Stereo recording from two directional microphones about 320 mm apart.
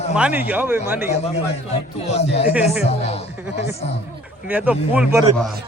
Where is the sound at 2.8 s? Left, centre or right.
Centre.